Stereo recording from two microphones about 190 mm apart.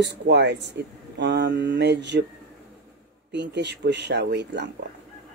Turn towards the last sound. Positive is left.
turn(degrees=-65)  # may be behind; listen again after turning